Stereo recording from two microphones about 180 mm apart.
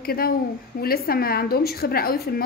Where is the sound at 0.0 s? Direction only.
55° left (ahead or behind).